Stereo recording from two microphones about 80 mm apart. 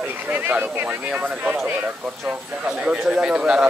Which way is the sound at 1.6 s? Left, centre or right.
Right.